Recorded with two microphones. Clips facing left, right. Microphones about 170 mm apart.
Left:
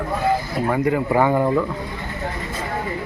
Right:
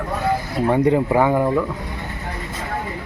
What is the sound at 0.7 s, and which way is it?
Speech, 25° right (ahead or behind).